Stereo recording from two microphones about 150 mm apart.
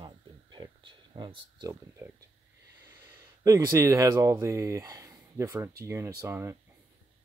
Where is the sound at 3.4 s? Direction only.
20° right (ahead or behind).